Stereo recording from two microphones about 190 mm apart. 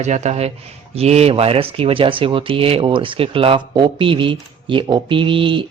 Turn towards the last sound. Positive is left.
turn(degrees=-25)  # may be behind; listen again after turning